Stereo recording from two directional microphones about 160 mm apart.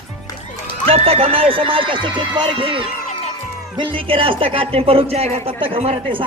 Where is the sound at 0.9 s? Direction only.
40° right (ahead or behind).